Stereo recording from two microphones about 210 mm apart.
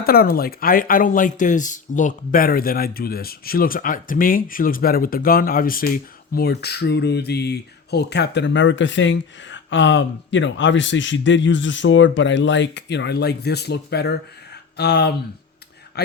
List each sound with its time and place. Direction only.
0.0 s speech: 45° left (ahead or behind)